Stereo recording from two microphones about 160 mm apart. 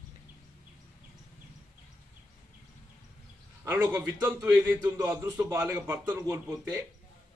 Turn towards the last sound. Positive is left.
turn(degrees=-15)  # may be behind; listen again after turning